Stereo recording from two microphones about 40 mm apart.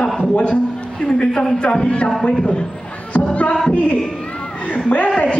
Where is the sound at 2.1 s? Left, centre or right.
Centre.